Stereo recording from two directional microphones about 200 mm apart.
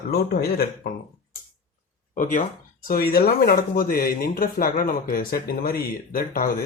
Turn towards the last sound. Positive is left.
turn(degrees=45)  # may be behind; listen again after turning